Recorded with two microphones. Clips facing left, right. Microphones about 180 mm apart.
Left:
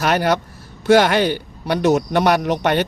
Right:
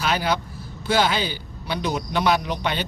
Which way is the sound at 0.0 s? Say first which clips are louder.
Left 6 dB; 70° left (ahead or behind).